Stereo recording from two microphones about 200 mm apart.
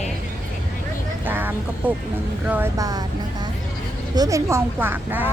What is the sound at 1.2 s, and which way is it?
Vehicle, 10° right (ahead or behind).